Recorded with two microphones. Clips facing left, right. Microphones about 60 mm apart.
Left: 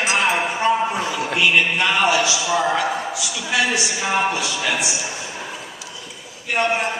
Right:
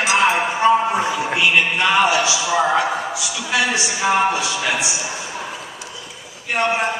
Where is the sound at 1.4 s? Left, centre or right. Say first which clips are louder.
Even; centre.